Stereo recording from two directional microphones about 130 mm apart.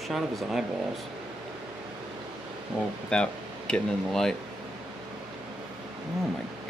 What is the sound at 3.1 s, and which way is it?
Speech, 5° left (ahead or behind).